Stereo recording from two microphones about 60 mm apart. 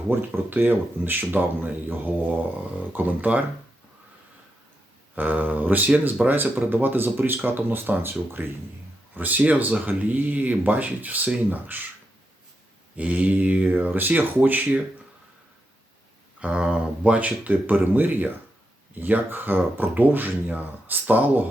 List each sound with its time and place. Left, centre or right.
0.1 s speech: right
5.1 s speech: right
13.0 s speech: right
16.4 s speech: centre